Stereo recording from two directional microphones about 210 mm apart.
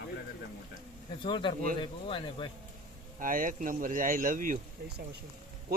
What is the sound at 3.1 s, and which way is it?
Speech, 40° right (ahead or behind).